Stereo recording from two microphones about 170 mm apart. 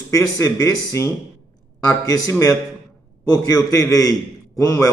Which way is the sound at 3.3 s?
20° left (ahead or behind).